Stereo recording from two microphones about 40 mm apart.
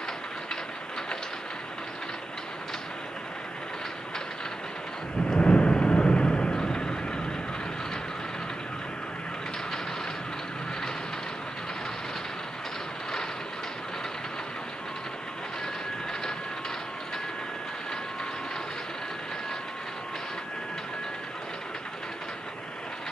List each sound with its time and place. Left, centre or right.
5.4 s vehicle: left